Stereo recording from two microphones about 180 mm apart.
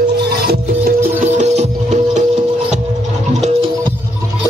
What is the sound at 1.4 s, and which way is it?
Music, 40° right (ahead or behind).